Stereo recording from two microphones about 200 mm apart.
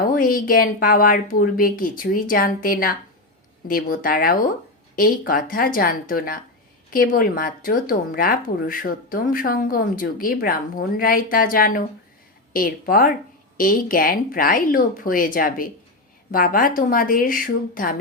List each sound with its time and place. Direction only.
0.1 s speech: 45° left (ahead or behind)